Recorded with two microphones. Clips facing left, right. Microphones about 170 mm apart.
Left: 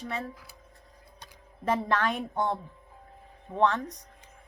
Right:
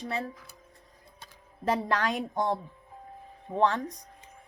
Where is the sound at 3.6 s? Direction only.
35° right (ahead or behind).